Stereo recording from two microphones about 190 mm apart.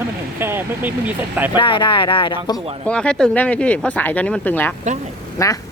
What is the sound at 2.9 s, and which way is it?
Speech, 5° left (ahead or behind).